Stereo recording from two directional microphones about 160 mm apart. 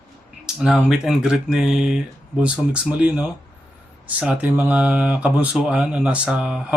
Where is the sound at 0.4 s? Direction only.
5° right (ahead or behind).